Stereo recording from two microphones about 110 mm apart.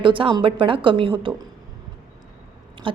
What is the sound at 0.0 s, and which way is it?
A woman's voice, 50° right (ahead or behind).